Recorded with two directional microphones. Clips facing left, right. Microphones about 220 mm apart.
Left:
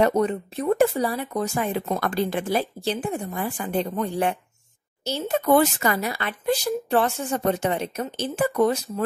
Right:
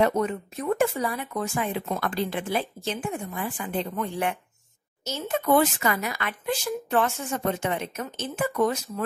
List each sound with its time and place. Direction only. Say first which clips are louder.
0.0 s speech: left 3 dB; 35° left (ahead or behind)